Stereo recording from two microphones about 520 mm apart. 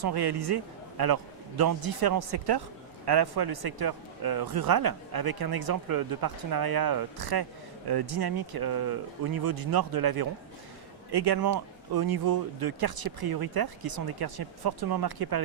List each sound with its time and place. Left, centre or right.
0.0 s speech: right